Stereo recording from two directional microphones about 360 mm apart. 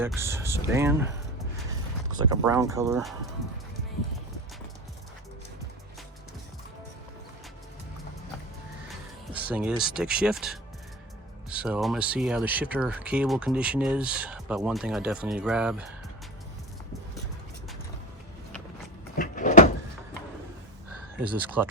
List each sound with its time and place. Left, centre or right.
0.0 s speech: centre
9.3 s speech: centre
19.2 s door: left
21.2 s speech: centre